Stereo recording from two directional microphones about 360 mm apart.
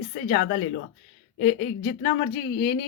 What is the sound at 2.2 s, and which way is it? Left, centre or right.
Speech, centre.